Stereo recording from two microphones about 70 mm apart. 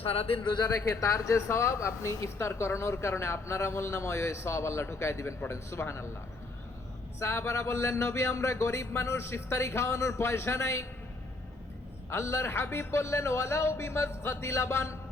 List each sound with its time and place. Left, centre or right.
0.5 s speech: left
7.2 s speech: left
12.1 s speech: left